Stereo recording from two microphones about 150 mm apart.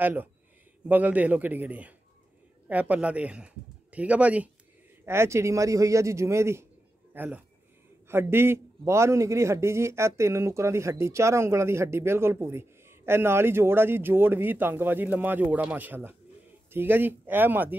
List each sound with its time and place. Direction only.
0.0 s a man's voice: 15° right (ahead or behind)